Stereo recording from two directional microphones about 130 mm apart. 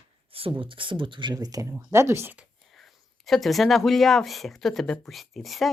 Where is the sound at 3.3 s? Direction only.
Centre (ahead or behind).